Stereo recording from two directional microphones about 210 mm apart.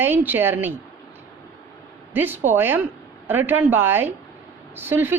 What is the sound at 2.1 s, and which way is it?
A woman's voice, 10° right (ahead or behind).